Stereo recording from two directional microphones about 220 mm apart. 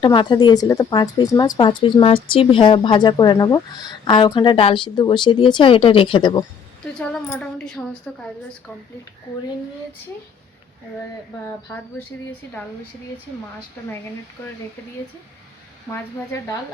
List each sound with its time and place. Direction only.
0.0 s a woman's voice: 20° left (ahead or behind)
7.0 s speech: 5° left (ahead or behind)
12.2 s speech: 5° left (ahead or behind)
15.9 s speech: 15° left (ahead or behind)